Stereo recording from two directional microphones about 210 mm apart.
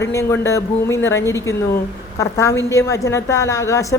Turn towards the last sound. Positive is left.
turn(degrees=15)  # may be behind; listen again after turning